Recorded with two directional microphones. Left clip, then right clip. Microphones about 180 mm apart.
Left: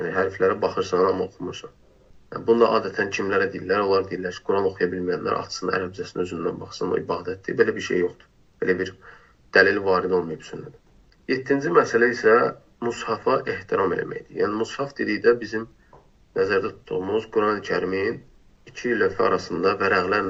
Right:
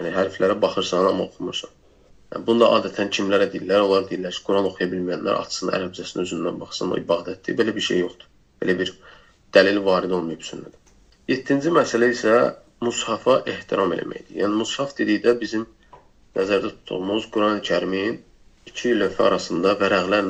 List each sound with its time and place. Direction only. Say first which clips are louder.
0.0 s speech: right 1 dB; 40° right (ahead or behind)
2.3 s speech: right 2 dB; 40° right (ahead or behind)